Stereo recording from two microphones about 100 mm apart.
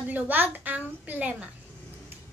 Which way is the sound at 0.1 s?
20° right (ahead or behind).